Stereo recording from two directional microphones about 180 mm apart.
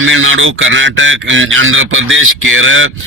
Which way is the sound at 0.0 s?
90° right.